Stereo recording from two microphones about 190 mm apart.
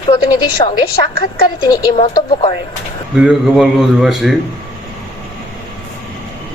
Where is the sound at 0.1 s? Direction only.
25° left (ahead or behind).